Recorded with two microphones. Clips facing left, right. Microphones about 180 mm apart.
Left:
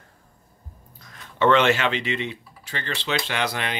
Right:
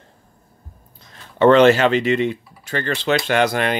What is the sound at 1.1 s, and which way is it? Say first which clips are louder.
Speech: right 7 dB; 35° right (ahead or behind).